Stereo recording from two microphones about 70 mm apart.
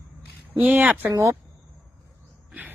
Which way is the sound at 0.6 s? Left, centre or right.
Right.